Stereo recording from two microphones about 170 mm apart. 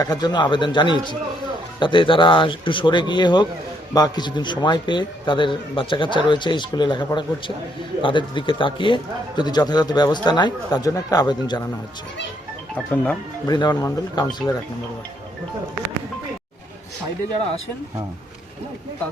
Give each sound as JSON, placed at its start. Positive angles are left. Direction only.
{"t": 0.0, "sound": "a man's voice", "side_deg": 20}
{"t": 12.7, "sound": "speech", "side_deg": 10}
{"t": 13.5, "sound": "a man's voice", "side_deg": 25}